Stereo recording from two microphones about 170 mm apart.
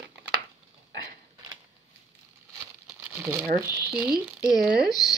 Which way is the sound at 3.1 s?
15° right (ahead or behind).